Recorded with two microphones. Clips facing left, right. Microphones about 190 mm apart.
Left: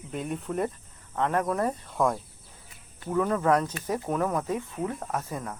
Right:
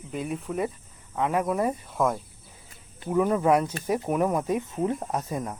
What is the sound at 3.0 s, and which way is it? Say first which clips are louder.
Speech: right 3 dB; 15° right (ahead or behind).